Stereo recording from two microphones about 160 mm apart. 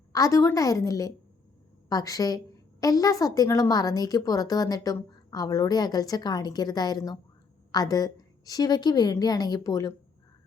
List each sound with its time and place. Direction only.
0.1 s a woman's voice: 20° left (ahead or behind)